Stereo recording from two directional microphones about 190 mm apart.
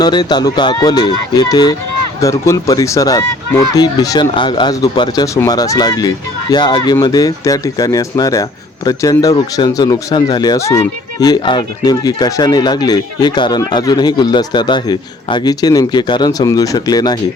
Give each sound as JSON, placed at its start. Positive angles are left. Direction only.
{"t": 0.0, "sound": "speech", "side_deg": 20}